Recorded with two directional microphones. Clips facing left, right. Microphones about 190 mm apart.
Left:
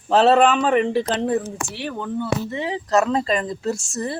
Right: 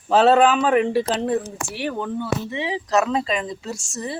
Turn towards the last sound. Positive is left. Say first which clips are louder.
# left 4 dB
turn(degrees=55)  # may be behind; listen again after turning